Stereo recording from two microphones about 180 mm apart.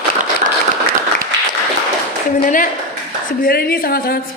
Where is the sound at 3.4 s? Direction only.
55° left (ahead or behind).